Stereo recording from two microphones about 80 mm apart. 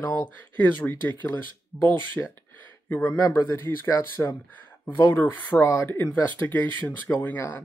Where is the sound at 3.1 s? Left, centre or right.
Left.